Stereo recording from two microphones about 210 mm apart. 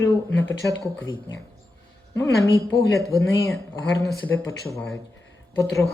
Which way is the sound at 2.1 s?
15° left (ahead or behind).